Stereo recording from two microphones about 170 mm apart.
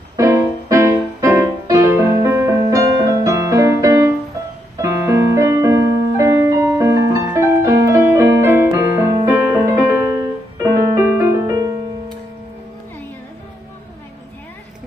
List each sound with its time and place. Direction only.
0.2 s music: 20° right (ahead or behind)
4.7 s piano: 15° right (ahead or behind)
10.6 s music: 15° right (ahead or behind)